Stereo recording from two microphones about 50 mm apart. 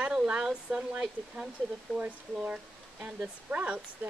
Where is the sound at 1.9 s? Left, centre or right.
Left.